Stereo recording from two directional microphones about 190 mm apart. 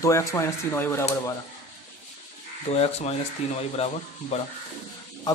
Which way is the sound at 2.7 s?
35° left (ahead or behind).